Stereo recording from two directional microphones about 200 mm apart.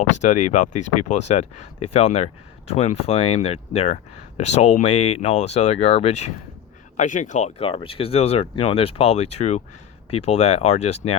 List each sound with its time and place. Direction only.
0.2 s speech: 35° left (ahead or behind)